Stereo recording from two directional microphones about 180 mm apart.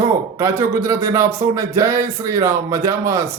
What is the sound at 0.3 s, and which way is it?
A man's voice, 15° right (ahead or behind).